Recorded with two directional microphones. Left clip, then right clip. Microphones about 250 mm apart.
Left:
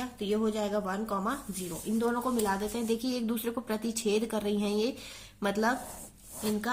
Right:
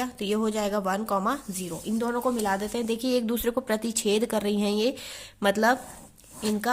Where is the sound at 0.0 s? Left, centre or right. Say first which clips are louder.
Right 3 dB; right.